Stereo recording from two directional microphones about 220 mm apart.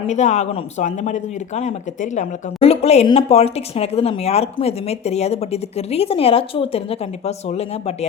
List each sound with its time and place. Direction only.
0.1 s speech: 30° left (ahead or behind)